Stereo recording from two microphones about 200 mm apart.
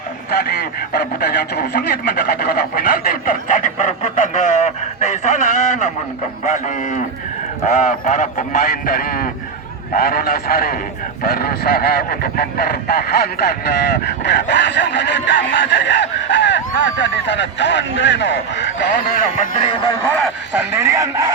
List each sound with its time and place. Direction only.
0.3 s radio: 50° left (ahead or behind)
6.4 s a sound: 40° left (ahead or behind)
7.7 s speech: 40° left (ahead or behind)
20.7 s speech: 15° right (ahead or behind)